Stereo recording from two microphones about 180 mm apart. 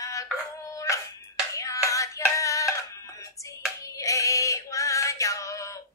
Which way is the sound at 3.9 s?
15° left (ahead or behind).